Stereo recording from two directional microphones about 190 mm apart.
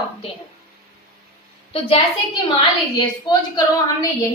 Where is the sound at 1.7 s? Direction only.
30° left (ahead or behind).